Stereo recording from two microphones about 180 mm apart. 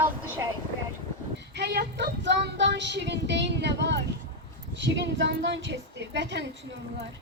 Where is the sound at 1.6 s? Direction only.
70° right (ahead or behind).